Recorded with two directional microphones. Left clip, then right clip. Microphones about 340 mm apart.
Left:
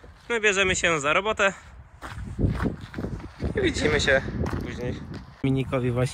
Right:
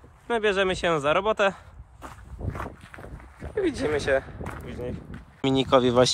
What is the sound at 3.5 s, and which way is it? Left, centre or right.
Speech, centre.